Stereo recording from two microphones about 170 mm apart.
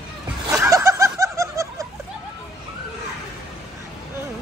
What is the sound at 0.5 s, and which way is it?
Laughter, 15° right (ahead or behind).